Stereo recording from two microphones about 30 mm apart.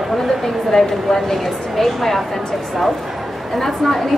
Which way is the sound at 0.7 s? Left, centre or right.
Centre.